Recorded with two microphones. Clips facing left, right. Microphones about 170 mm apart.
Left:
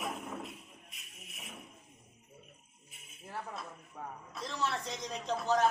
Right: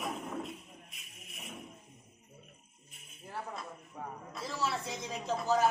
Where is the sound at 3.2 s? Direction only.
Centre (ahead or behind).